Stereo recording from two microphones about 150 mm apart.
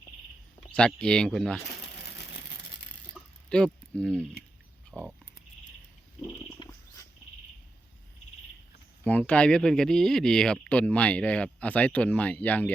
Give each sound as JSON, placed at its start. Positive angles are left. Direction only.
{"t": 0.7, "sound": "speech", "side_deg": 5}
{"t": 3.5, "sound": "speech", "side_deg": 5}
{"t": 6.6, "sound": "a sound", "side_deg": 25}
{"t": 9.0, "sound": "speech", "side_deg": 10}